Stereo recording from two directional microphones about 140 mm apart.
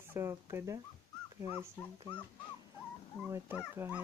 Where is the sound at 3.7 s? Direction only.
15° right (ahead or behind).